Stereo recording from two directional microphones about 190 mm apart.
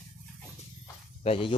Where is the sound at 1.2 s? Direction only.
30° left (ahead or behind).